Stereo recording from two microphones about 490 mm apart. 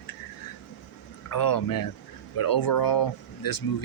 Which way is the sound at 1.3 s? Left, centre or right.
Left.